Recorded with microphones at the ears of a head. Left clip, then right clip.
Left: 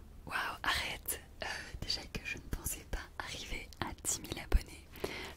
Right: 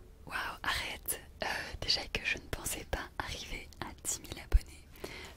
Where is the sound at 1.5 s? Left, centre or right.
Right.